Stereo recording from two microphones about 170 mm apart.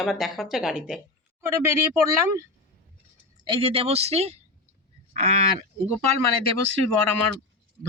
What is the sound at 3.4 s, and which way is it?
Speech, 30° right (ahead or behind).